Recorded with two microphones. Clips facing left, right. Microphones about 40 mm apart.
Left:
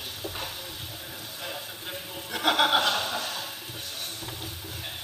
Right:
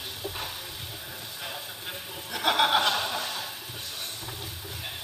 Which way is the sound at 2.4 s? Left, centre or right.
Centre.